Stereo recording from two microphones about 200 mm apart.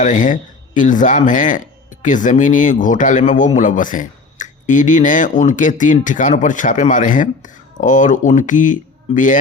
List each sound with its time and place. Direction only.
0.0 s speech: 40° left (ahead or behind)